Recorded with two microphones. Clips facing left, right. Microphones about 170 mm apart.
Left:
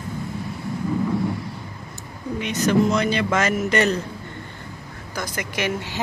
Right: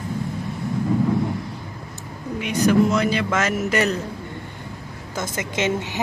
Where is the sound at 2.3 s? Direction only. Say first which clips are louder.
Right 2 dB; 10° right (ahead or behind).